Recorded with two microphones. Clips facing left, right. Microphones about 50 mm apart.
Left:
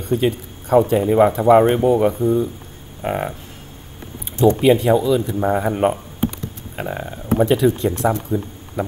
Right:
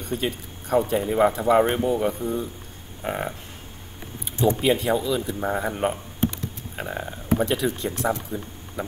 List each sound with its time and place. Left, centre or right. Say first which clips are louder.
0.0 s speech: left 8 dB; centre
4.6 s speech: left 7 dB; centre